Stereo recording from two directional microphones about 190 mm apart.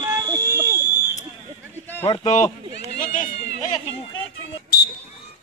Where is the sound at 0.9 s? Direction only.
15° left (ahead or behind).